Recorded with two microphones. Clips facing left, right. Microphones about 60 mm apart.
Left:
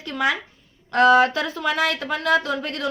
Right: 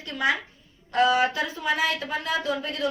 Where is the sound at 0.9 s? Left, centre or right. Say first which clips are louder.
Left 6 dB; left.